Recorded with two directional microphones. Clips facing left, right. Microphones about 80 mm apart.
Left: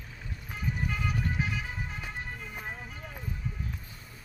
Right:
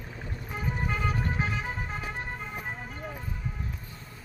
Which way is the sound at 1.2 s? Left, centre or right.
Right.